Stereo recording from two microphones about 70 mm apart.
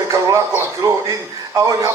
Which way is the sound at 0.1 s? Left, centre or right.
Right.